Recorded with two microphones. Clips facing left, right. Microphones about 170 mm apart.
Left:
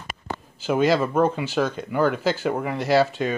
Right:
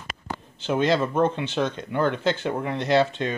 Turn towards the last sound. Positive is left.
turn(degrees=5)  # may be behind; listen again after turning